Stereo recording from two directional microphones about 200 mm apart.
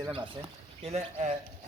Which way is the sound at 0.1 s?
25° right (ahead or behind).